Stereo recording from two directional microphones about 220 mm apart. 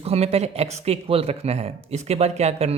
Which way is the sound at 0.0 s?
30° right (ahead or behind).